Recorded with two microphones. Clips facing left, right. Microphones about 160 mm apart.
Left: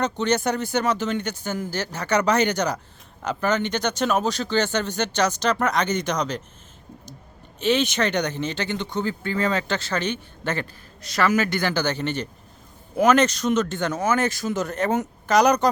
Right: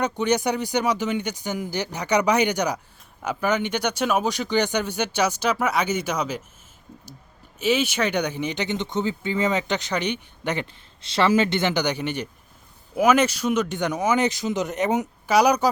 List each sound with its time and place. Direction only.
0.0 s speech: 10° right (ahead or behind)
7.6 s speech: 5° right (ahead or behind)